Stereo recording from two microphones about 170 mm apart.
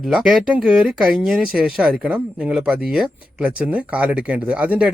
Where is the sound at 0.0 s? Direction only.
Centre (ahead or behind).